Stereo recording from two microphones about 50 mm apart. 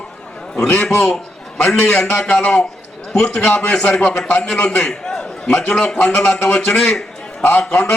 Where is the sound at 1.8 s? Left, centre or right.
Left.